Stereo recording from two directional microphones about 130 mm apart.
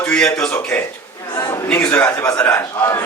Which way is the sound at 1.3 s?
25° left (ahead or behind).